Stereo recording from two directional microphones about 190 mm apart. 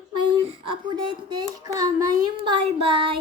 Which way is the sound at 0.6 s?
25° right (ahead or behind).